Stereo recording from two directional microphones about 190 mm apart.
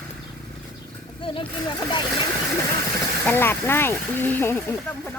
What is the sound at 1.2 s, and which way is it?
Speech, 25° left (ahead or behind).